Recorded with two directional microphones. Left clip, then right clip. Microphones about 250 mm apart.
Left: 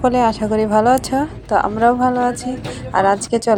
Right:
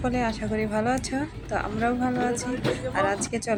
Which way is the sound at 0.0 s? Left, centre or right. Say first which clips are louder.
Left 12 dB; left.